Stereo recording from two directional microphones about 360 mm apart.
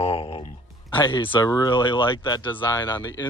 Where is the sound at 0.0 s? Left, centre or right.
Centre.